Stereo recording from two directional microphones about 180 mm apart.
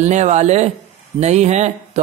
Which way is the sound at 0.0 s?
40° right (ahead or behind).